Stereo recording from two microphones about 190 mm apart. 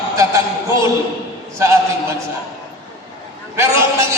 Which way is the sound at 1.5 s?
15° right (ahead or behind).